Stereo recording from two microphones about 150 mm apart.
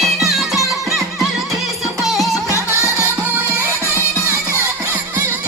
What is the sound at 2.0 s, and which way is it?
Music, centre (ahead or behind).